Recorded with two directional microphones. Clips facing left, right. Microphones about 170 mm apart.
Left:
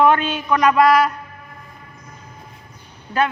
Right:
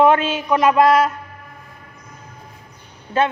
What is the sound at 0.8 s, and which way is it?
Speech, 25° right (ahead or behind).